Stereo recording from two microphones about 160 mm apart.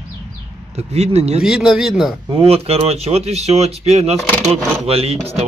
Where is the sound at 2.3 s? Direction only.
40° right (ahead or behind).